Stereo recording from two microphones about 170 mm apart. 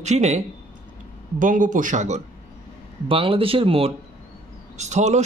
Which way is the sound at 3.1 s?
30° right (ahead or behind).